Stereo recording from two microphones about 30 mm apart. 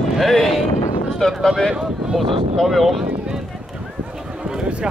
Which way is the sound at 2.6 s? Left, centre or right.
Centre.